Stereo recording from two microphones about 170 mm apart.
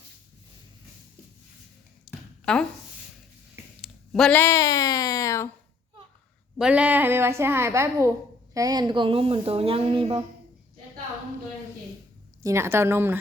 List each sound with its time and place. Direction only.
2.0 s a sound: 5° left (ahead or behind)
3.8 s speech: centre (ahead or behind); by 5.5 s 20° left (ahead or behind)
6.6 s a woman's voice: 5° right (ahead or behind); by 10.2 s 30° right (ahead or behind)
12.4 s a woman's voice: 15° right (ahead or behind)